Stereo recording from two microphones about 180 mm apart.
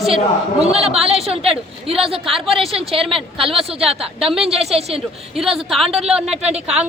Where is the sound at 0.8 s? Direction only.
35° right (ahead or behind).